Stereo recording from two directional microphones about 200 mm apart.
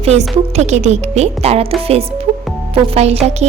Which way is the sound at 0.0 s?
30° right (ahead or behind).